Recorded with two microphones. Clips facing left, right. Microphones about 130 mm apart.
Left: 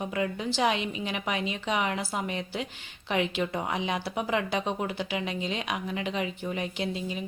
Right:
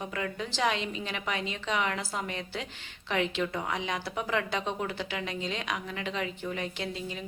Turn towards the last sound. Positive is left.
turn(degrees=15)  # may be behind; listen again after turning